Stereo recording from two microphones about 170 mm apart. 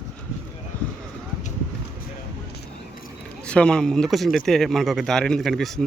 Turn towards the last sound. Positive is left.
turn(degrees=0)  # may be behind; listen again after turning